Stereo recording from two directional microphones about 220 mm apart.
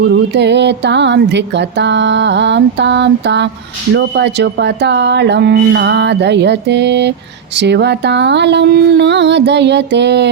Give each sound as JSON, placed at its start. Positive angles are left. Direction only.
{"t": 0.3, "sound": "speech", "side_deg": -50}